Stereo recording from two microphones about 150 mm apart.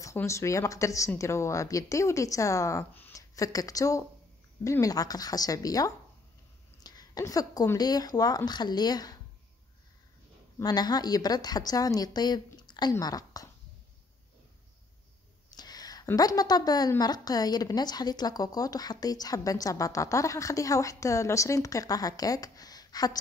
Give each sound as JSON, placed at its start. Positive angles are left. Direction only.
{"t": 0.0, "sound": "a woman's voice", "side_deg": 20}
{"t": 10.6, "sound": "a woman's voice", "side_deg": 25}
{"t": 15.5, "sound": "a sound", "side_deg": 25}
{"t": 16.2, "sound": "a woman's voice", "side_deg": 25}